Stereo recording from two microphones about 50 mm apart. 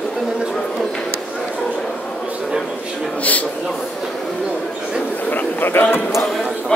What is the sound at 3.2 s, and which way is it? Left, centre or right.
Speech, left.